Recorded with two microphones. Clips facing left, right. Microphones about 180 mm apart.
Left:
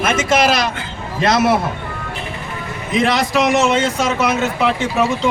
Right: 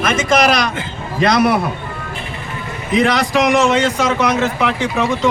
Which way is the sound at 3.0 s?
Centre (ahead or behind).